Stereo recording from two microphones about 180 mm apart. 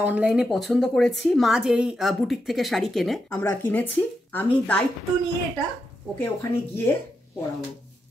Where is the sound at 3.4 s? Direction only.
10° left (ahead or behind).